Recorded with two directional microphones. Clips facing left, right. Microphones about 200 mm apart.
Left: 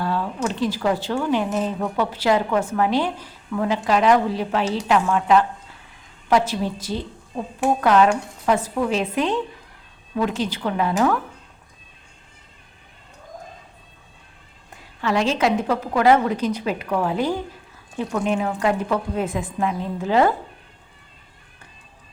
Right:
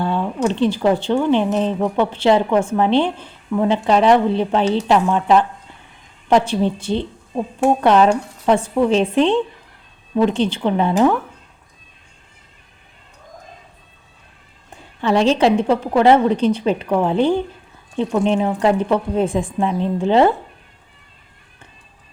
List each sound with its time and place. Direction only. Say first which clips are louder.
0.0 s a sound: right 4 dB; 25° right (ahead or behind)
0.4 s a woman's voice: right 6 dB; 30° right (ahead or behind)
15.0 s a woman's voice: right 5 dB; 30° right (ahead or behind)